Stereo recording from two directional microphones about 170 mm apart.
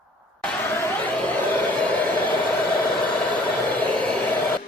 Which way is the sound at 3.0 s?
10° left (ahead or behind).